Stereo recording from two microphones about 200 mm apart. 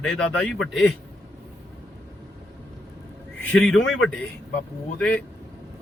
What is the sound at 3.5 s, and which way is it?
Speech, 5° left (ahead or behind).